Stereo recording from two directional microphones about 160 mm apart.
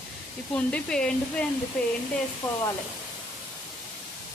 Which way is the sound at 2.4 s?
25° left (ahead or behind).